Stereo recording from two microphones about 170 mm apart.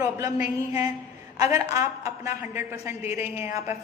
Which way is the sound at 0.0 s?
15° right (ahead or behind).